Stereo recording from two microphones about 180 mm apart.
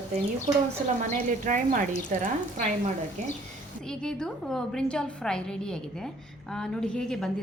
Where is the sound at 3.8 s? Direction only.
5° left (ahead or behind).